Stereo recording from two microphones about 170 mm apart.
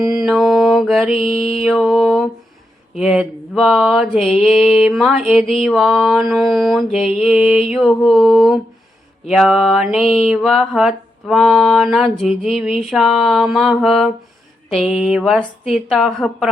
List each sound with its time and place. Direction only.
0.2 s mantra: centre (ahead or behind)
3.0 s speech: 5° right (ahead or behind)
3.8 s mantra: centre (ahead or behind)